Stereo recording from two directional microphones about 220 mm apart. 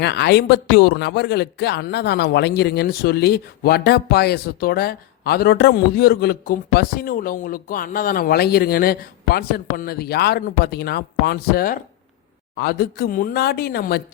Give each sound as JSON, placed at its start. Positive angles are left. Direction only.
{"t": 0.0, "sound": "a man's voice", "side_deg": 50}